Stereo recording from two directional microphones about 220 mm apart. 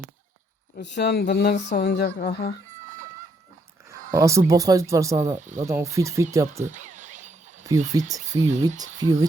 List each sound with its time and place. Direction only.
0.8 s speech: 50° left (ahead or behind)
3.8 s speech: 15° right (ahead or behind)
5.4 s speech: 35° right (ahead or behind)
5.6 s speech: 15° right (ahead or behind)
6.7 s a sound: 35° right (ahead or behind)
7.9 s speech: 15° right (ahead or behind)